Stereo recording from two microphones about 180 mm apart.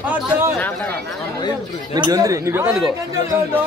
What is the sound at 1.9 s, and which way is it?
Chatter, 20° right (ahead or behind).